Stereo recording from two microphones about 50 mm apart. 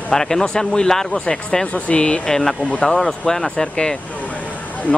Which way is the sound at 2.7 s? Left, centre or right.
Left.